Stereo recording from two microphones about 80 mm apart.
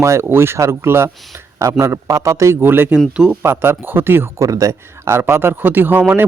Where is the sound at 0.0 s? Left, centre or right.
Right.